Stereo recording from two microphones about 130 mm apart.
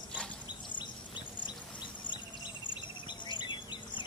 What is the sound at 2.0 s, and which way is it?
Cricket, 35° left (ahead or behind).